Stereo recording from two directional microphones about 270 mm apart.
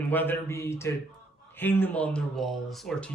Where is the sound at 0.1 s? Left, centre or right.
Centre.